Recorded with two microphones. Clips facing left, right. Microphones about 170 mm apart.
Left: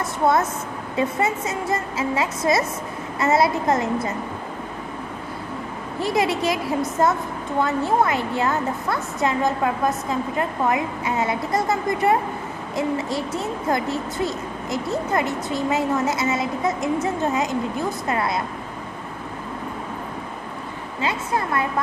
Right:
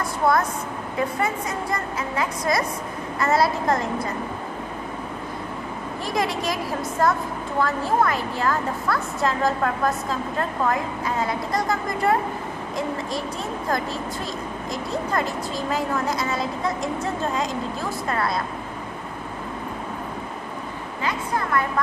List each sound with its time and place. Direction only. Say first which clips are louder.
0.0 s a sound: left 1 dB; 25° left (ahead or behind)
0.9 s a woman's voice: left 3 dB; 25° left (ahead or behind)
5.9 s a woman's voice: left 4 dB; 25° left (ahead or behind)
7.6 s a woman's voice: left 1 dB; 25° left (ahead or behind)